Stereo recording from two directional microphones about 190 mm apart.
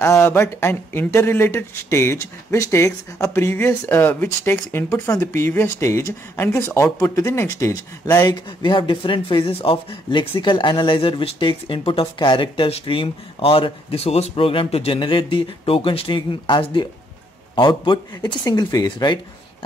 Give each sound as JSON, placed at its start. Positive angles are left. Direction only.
{"t": 0.0, "sound": "speech", "side_deg": 15}